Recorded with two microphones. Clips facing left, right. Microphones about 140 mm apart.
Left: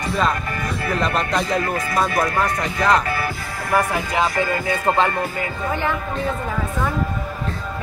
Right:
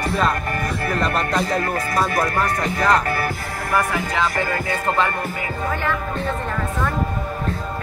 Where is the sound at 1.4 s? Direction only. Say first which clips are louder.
Even; 45° right (ahead or behind).